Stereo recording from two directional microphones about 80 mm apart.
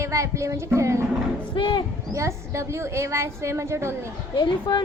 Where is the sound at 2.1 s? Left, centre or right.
Right.